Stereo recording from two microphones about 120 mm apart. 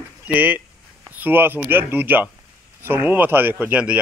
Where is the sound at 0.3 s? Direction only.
15° right (ahead or behind).